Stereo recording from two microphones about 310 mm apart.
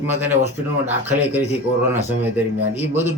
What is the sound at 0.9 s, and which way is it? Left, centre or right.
A man's voice, centre.